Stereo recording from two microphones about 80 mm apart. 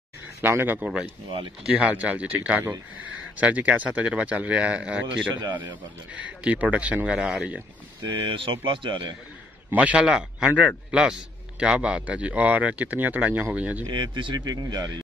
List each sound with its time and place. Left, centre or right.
0.4 s speech: right
0.7 s speech: centre
5.3 s a man's voice: right
6.2 s speech: centre
7.2 s speech: centre
8.0 s speech: right
9.7 s speech: centre
13.8 s speech: right